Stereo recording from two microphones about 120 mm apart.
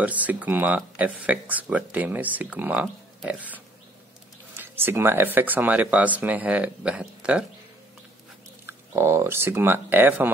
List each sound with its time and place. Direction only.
0.0 s speech: 15° right (ahead or behind)
4.6 s speech: 20° right (ahead or behind)
8.6 s speech: 25° right (ahead or behind)